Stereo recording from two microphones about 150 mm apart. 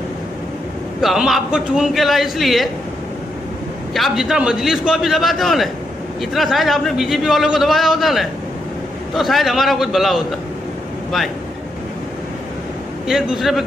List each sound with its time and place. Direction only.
1.0 s a man's voice: centre (ahead or behind)
3.9 s a man's voice: centre (ahead or behind)
13.0 s a man's voice: centre (ahead or behind)